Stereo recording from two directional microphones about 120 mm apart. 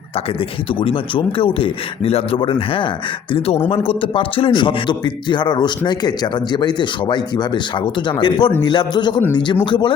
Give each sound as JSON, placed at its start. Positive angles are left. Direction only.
{"t": 0.8, "sound": "a man's voice", "side_deg": 45}